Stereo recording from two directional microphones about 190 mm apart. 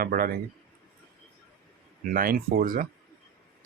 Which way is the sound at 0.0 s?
50° right (ahead or behind).